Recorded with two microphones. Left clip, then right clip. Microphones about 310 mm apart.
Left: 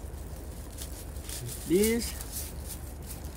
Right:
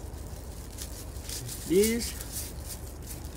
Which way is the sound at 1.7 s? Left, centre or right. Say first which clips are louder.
Right 1 dB; centre.